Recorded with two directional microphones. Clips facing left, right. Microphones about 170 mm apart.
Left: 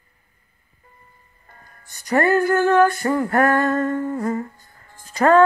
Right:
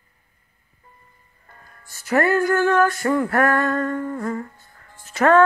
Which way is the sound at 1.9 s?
Centre (ahead or behind).